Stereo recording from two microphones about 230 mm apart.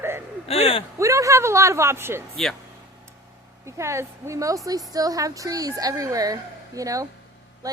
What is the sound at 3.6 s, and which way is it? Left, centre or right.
A woman's voice, centre.